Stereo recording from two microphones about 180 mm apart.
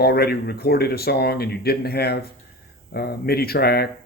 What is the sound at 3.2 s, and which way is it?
Speech, 60° left (ahead or behind).